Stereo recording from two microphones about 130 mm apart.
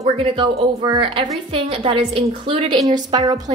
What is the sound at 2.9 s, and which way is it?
Speech, 30° right (ahead or behind).